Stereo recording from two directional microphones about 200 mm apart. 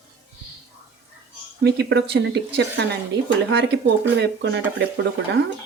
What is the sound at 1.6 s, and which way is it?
Speech, 55° right (ahead or behind).